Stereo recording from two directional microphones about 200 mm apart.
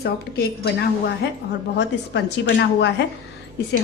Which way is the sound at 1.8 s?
60° left (ahead or behind).